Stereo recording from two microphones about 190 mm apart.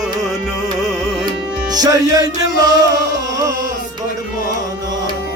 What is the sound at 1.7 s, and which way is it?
Music, 20° right (ahead or behind).